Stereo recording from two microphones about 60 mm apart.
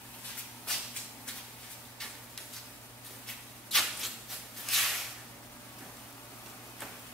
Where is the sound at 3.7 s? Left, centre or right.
Centre.